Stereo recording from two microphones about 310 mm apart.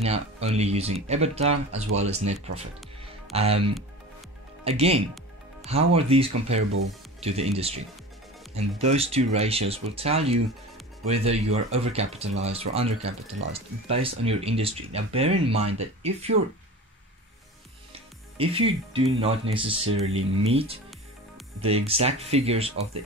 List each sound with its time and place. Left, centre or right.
0.0 s speech: centre
8.8 s speech: centre
17.9 s speech: centre
20.1 s speech: right
20.5 s speech: centre